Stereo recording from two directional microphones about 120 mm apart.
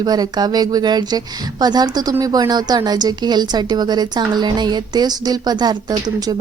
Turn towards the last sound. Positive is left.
turn(degrees=-35)  # may be behind; listen again after turning